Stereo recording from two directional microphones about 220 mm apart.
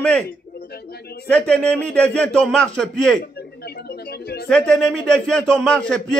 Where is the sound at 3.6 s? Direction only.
45° left (ahead or behind).